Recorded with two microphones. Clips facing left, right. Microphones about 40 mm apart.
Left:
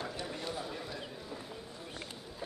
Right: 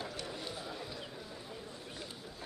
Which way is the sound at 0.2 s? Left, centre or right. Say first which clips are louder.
Left 3 dB; centre.